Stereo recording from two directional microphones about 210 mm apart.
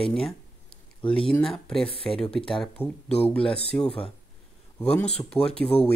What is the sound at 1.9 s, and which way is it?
Speech, 25° left (ahead or behind).